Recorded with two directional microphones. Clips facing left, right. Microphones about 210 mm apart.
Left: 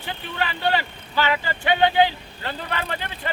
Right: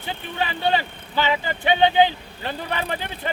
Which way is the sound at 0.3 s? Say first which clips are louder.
Right 1 dB; 15° right (ahead or behind).